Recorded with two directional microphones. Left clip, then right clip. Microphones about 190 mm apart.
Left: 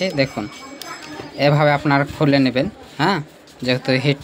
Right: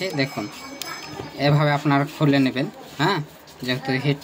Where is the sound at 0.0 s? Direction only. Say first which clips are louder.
Left 5 dB; 35° left (ahead or behind).